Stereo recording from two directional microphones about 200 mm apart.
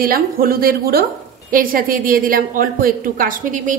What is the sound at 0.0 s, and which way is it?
A woman's voice, 45° right (ahead or behind).